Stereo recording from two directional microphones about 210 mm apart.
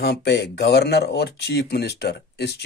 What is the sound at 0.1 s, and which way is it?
Speech, 50° left (ahead or behind).